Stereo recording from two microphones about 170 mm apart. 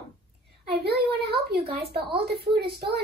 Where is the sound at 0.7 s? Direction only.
75° right (ahead or behind).